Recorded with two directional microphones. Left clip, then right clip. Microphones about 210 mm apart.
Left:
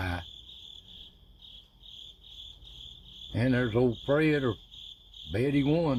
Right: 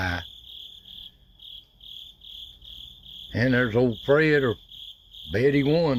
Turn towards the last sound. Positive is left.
turn(degrees=-25)  # may be behind; listen again after turning